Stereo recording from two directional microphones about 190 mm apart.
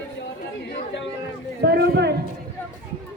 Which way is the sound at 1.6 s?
55° right (ahead or behind).